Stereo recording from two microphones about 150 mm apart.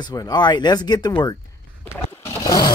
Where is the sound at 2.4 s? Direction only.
25° left (ahead or behind).